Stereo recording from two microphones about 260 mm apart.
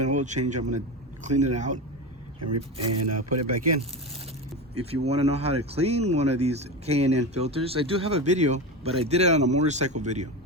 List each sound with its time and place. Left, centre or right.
0.0 s speech: right
2.4 s speech: right
5.0 s speech: right